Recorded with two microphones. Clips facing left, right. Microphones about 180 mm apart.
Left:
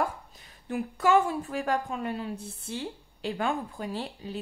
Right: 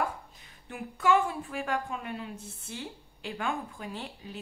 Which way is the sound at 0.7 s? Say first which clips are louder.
Left 2 dB; 40° left (ahead or behind).